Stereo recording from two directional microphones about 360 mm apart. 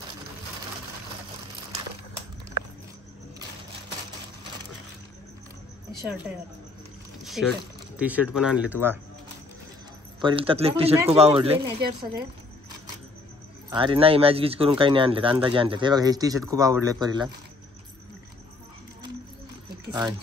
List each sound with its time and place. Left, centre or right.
6.0 s speech: centre
7.5 s speech: centre
10.2 s speech: centre
13.7 s speech: centre
19.9 s speech: centre